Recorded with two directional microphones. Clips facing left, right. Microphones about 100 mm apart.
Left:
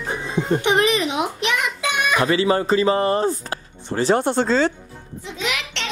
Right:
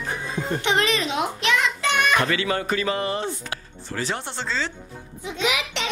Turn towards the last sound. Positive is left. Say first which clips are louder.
# right 2 dB
turn(degrees=-10)  # may be behind; listen again after turning